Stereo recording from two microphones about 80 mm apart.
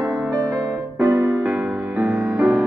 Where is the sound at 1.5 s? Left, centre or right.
Centre.